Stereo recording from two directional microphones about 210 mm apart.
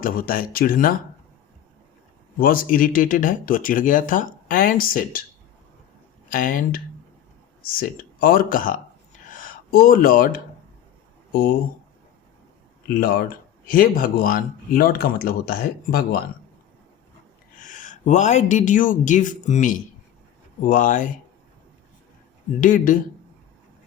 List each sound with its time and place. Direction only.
0.0 s speech: 40° left (ahead or behind)
2.4 s speech: 45° left (ahead or behind)
6.3 s speech: 40° left (ahead or behind)
13.0 s speech: 45° left (ahead or behind)
17.7 s speech: 35° left (ahead or behind)
22.6 s speech: 40° left (ahead or behind)